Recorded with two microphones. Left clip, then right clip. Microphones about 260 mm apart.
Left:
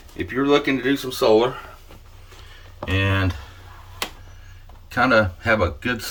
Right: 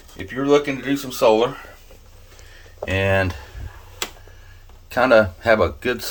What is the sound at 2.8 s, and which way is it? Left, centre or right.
Speech, centre.